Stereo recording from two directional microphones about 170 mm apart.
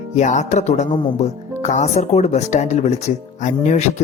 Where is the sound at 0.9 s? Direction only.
30° left (ahead or behind).